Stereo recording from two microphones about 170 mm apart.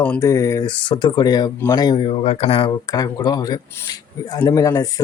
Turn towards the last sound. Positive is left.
turn(degrees=20)  # may be behind; listen again after turning